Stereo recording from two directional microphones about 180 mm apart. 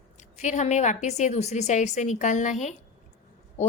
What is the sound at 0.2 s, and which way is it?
A woman's voice, 40° left (ahead or behind).